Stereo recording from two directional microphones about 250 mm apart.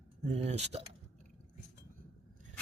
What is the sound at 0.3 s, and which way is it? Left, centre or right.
Cutlery, right.